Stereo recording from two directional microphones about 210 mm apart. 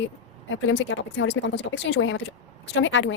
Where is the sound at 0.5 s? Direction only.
65° left (ahead or behind).